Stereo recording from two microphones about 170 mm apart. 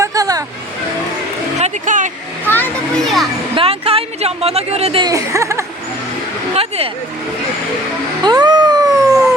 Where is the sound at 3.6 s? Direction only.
35° right (ahead or behind).